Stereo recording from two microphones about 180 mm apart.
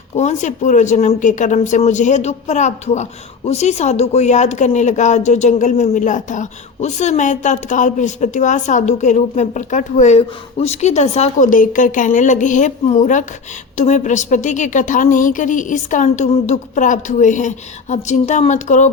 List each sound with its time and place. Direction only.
0.2 s a woman's voice: 40° left (ahead or behind)